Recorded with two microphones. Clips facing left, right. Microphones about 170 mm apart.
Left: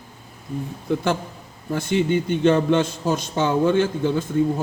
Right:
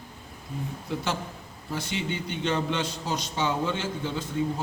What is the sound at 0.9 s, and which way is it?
A man's voice, 55° left (ahead or behind).